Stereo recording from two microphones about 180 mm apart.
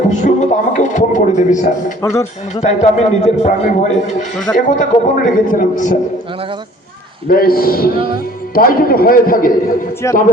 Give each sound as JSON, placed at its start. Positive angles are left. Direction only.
{"t": 0.1, "sound": "speech", "side_deg": 40}
{"t": 2.0, "sound": "speech", "side_deg": 15}
{"t": 2.6, "sound": "a man's voice", "side_deg": 40}
{"t": 7.3, "sound": "a man's voice", "side_deg": 55}
{"t": 10.0, "sound": "speech", "side_deg": 15}